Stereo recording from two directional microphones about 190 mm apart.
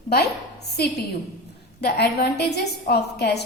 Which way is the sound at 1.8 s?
60° left (ahead or behind).